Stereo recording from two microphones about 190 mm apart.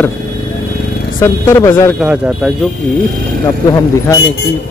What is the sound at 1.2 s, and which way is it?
Speech, 15° left (ahead or behind).